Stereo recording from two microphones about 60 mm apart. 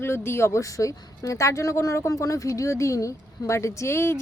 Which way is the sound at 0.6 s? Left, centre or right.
Left.